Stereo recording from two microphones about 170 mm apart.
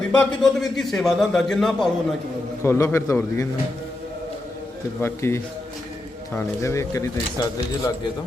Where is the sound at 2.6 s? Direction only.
15° left (ahead or behind).